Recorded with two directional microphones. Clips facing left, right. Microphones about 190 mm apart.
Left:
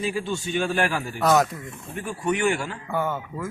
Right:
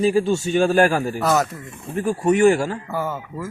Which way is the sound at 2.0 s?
40° right (ahead or behind).